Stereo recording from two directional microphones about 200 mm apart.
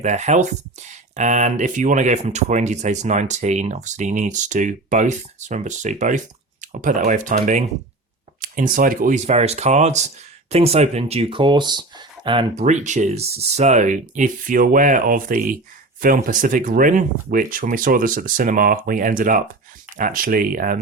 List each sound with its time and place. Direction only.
0.0 s speech: 35° right (ahead or behind)